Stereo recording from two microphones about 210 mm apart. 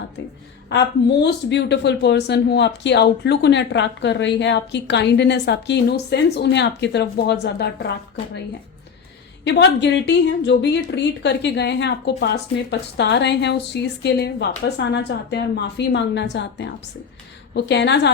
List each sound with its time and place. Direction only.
0.7 s speech: 55° left (ahead or behind)
9.4 s speech: 55° left (ahead or behind)